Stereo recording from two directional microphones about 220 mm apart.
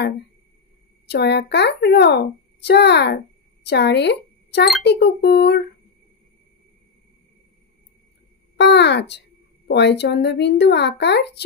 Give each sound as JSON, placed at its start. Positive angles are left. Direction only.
{"t": 1.1, "sound": "speech", "side_deg": 50}
{"t": 8.5, "sound": "speech", "side_deg": 50}